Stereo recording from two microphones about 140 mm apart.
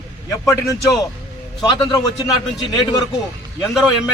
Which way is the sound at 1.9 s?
30° left (ahead or behind).